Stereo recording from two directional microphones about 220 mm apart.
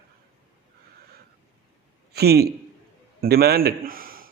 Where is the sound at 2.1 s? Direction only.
45° right (ahead or behind).